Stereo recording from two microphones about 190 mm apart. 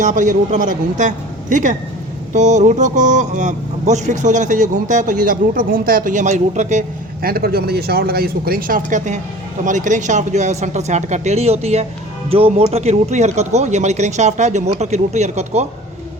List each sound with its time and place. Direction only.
0.0 s speech: 40° right (ahead or behind)